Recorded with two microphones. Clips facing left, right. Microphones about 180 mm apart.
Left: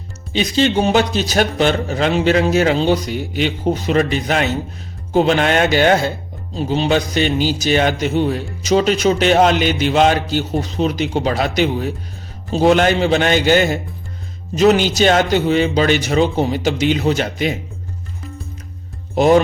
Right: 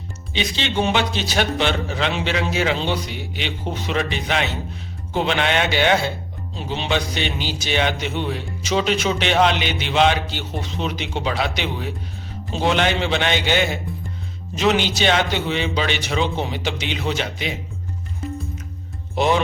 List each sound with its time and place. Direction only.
0.3 s speech: 40° left (ahead or behind)
19.1 s speech: 45° left (ahead or behind)